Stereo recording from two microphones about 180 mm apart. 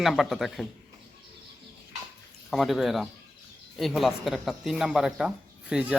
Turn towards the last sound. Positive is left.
turn(degrees=-5)  # may be behind; listen again after turning